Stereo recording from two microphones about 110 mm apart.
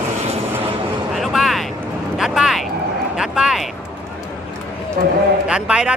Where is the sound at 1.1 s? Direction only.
Centre (ahead or behind).